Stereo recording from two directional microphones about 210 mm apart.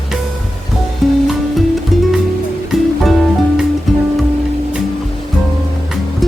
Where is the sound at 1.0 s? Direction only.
Centre (ahead or behind).